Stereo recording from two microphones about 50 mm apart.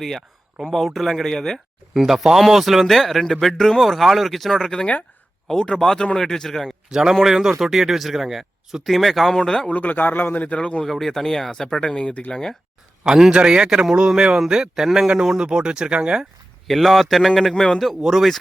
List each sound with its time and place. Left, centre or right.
0.0 s speech: centre
5.5 s speech: centre
6.9 s speech: centre
9.6 s a man's voice: left
10.4 s a man's voice: left
10.8 s speech: centre
13.1 s speech: centre
16.6 s speech: centre
17.7 s speech: centre